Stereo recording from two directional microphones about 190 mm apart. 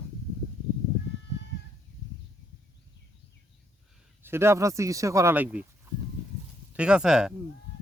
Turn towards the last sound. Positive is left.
turn(degrees=-5)  # may be behind; listen again after turning